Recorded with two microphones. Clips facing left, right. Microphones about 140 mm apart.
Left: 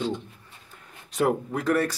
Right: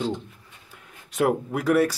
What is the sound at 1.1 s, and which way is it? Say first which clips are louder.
Speech: right 1 dB; 5° right (ahead or behind).